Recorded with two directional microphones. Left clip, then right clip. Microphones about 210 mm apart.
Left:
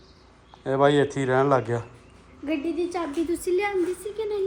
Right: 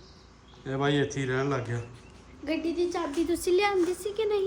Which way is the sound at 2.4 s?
45° left (ahead or behind).